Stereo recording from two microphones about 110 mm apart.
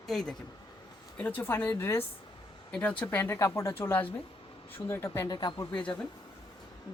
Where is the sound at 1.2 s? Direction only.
15° left (ahead or behind); by 5.6 s 40° left (ahead or behind).